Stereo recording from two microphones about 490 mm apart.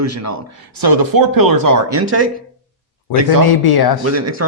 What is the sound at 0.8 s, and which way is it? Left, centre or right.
Speech, right.